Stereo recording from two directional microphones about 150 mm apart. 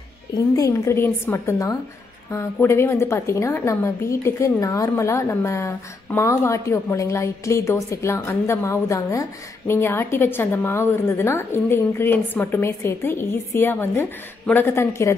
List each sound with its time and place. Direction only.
0.6 s a woman's voice: 20° left (ahead or behind)